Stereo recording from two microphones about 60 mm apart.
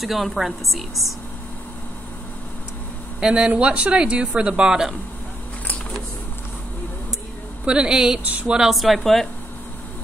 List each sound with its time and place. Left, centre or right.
0.0 s a woman's voice: centre
3.2 s speech: centre
7.6 s speech: centre
8.3 s speech: right
8.5 s a woman's voice: centre